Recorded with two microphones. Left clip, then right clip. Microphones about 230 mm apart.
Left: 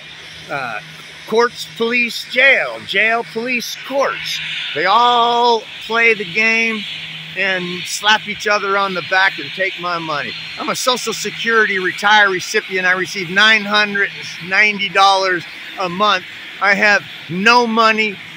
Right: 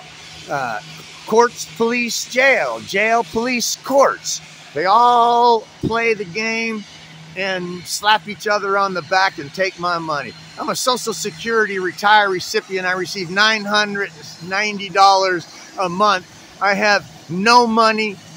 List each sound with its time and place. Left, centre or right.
0.5 s speech: centre
3.5 s speech: right
4.0 s speech: centre
7.6 s speech: centre
8.0 s speech: centre
9.6 s speech: centre
9.8 s speech: centre